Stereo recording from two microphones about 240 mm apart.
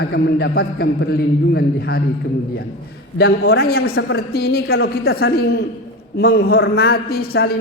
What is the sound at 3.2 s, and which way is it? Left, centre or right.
A man's voice, left.